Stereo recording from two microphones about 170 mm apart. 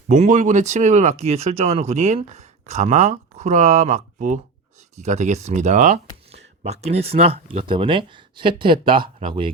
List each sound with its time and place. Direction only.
0.1 s speech: 45° right (ahead or behind); by 9.5 s 30° right (ahead or behind)